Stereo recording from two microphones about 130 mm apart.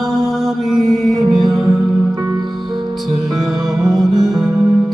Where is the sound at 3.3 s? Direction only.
Centre (ahead or behind).